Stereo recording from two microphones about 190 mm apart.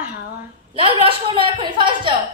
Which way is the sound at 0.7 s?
25° right (ahead or behind).